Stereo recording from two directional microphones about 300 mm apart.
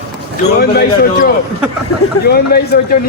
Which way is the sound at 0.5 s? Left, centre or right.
Left.